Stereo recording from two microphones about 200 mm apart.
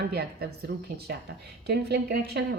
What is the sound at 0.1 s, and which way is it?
A woman's voice, 50° right (ahead or behind).